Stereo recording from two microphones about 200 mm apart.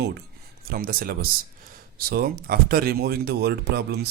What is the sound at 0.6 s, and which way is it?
Speech, 50° right (ahead or behind).